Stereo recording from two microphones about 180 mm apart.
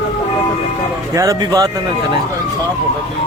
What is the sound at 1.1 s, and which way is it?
Speech, 20° right (ahead or behind).